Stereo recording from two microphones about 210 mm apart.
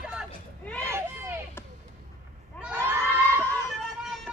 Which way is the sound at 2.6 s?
10° right (ahead or behind).